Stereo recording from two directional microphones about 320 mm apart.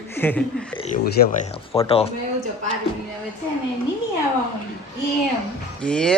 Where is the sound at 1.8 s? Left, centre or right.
Centre.